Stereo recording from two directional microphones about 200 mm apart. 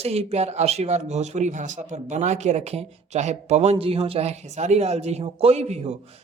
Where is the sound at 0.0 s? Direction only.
30° right (ahead or behind).